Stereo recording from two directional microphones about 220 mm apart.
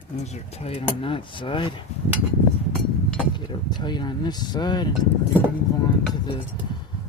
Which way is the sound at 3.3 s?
20° left (ahead or behind).